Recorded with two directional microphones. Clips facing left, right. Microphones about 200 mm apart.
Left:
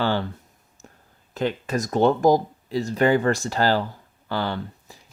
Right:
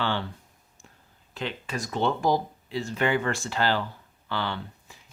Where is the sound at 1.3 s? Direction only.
45° left (ahead or behind).